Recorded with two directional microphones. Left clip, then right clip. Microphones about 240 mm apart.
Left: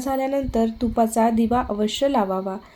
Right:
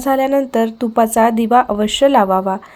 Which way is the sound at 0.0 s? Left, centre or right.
Right.